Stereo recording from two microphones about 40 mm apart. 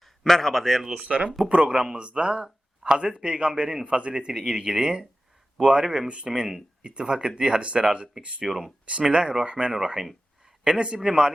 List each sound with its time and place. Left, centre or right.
0.0 s a man's voice: centre
1.0 s speech: right; by 6.1 s centre
6.1 s speech: right
8.4 s speech: centre